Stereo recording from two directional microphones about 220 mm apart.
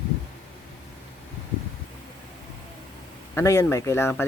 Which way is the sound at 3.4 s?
10° left (ahead or behind).